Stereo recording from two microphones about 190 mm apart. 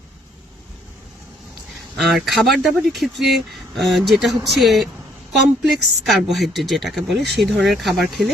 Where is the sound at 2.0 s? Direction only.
Centre (ahead or behind).